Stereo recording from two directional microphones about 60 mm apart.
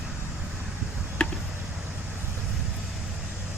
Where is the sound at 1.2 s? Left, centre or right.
Centre.